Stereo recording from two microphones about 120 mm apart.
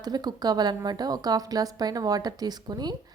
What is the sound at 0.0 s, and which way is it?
A woman's voice, 35° right (ahead or behind).